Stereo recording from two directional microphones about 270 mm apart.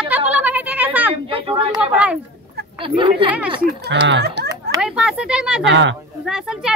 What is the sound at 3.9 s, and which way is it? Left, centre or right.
Speech, right.